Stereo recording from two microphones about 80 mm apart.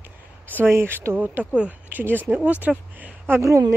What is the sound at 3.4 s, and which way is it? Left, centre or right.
Speech, right.